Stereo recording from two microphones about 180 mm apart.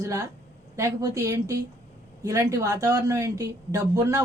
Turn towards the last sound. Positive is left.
turn(degrees=-20)  # may be behind; listen again after turning